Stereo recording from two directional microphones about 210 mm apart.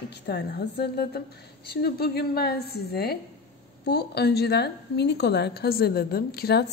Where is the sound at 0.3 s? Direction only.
50° left (ahead or behind).